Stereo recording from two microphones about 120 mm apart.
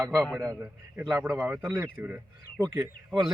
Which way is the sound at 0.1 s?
Centre (ahead or behind).